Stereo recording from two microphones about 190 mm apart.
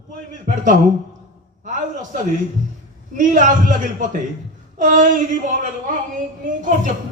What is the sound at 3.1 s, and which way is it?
Speech, 45° right (ahead or behind).